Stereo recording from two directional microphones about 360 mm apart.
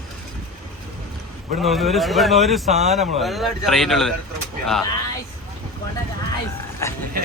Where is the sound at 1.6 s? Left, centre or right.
Centre.